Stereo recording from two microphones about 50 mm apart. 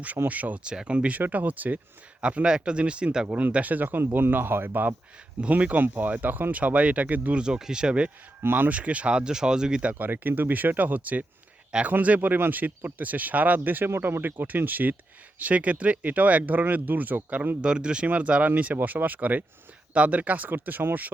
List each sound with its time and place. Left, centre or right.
0.3 s speech: right
0.6 s speech: centre; by 1.8 s right
2.2 s speech: right
3.3 s speech: right
7.3 s speech: centre
8.4 s speech: right
8.7 s speech: right
9.9 s speech: right
17.6 s speech: centre; by 21.1 s right